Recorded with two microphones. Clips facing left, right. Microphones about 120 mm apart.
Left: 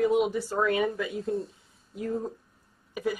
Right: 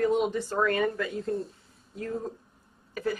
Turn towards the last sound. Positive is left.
turn(degrees=10)  # may be behind; listen again after turning